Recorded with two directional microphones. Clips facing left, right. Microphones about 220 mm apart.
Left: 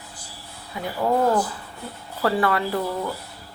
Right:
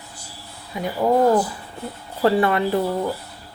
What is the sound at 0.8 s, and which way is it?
A woman's voice, 15° right (ahead or behind).